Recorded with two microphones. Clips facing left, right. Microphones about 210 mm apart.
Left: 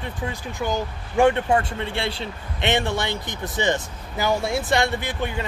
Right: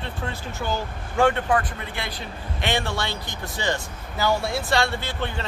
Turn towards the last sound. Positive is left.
turn(degrees=15)  # may be behind; listen again after turning